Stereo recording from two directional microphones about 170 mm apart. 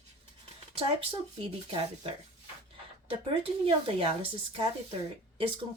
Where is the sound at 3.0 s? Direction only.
30° right (ahead or behind).